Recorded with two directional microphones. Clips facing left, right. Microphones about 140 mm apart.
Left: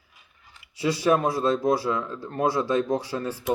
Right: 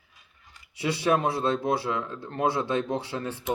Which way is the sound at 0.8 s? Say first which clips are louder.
Left 3 dB; 25° right (ahead or behind).